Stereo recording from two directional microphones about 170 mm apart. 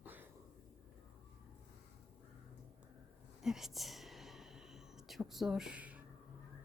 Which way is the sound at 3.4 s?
Centre (ahead or behind).